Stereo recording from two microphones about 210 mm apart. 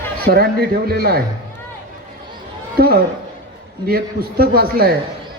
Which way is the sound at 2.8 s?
45° right (ahead or behind).